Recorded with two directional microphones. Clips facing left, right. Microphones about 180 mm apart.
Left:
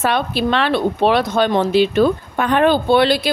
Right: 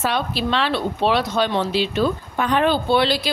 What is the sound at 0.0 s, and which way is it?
Speech, 55° left (ahead or behind).